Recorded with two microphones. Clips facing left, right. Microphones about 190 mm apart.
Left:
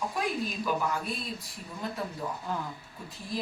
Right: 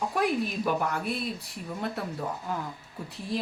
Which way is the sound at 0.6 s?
65° right (ahead or behind).